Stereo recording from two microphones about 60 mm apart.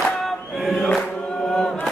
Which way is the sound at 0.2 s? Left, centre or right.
Centre.